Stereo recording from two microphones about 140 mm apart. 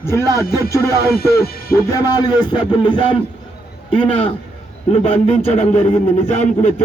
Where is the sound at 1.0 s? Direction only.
90° left.